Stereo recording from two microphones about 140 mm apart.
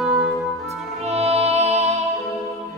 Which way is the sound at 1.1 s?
50° right (ahead or behind).